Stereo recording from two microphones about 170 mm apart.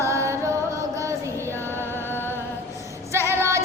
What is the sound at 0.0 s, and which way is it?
Carnatic music, 15° right (ahead or behind).